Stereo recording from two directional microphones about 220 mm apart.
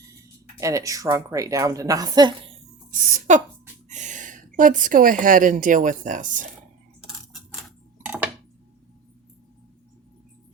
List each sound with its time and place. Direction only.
0.6 s a woman's voice: 15° right (ahead or behind)
3.0 s a woman's voice: 35° right (ahead or behind)
8.0 s tick-tock: 5° right (ahead or behind)